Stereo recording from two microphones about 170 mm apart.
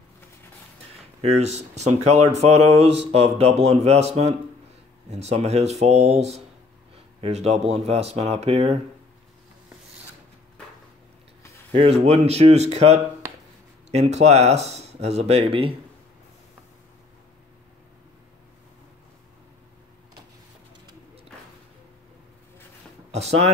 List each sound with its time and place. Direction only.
1.2 s speech: 40° right (ahead or behind)
11.7 s speech: 35° right (ahead or behind)
23.1 s speech: 40° right (ahead or behind)